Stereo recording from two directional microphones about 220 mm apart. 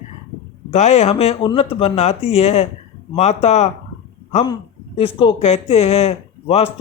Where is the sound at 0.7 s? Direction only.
30° left (ahead or behind).